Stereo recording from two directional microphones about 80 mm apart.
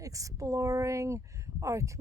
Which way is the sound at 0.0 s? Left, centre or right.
Right.